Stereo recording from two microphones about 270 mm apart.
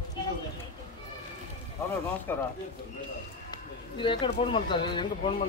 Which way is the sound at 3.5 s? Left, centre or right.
Centre.